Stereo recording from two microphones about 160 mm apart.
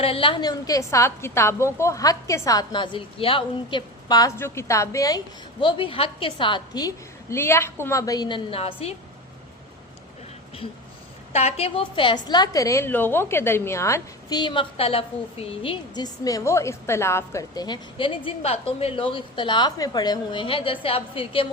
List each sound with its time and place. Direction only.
0.0 s a woman's voice: 35° left (ahead or behind)
4.4 s a woman's voice: 15° left (ahead or behind); by 9.0 s 40° left (ahead or behind)
11.3 s a woman's voice: 40° left (ahead or behind)